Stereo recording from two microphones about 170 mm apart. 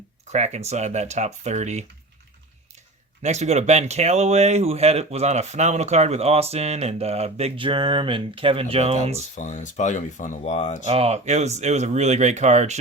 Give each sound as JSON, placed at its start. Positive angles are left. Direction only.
{"t": 0.3, "sound": "speech", "side_deg": -40}
{"t": 3.2, "sound": "speech", "side_deg": -40}
{"t": 9.1, "sound": "speech", "side_deg": 45}
{"t": 10.8, "sound": "speech", "side_deg": -35}